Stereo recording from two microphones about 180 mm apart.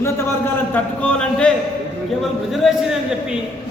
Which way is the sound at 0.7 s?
5° left (ahead or behind).